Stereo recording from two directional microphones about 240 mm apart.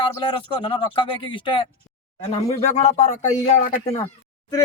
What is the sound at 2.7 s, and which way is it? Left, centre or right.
Speech, left.